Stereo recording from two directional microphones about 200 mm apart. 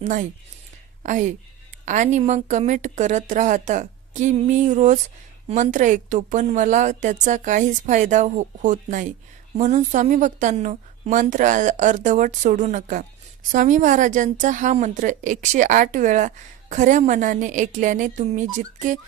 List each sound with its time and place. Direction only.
0.0 s a woman's voice: 40° right (ahead or behind)